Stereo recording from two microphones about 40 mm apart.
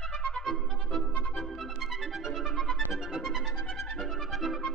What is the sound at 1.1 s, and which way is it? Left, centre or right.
Music, left.